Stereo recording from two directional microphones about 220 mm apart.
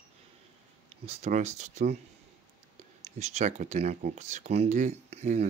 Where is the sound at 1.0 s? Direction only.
30° right (ahead or behind).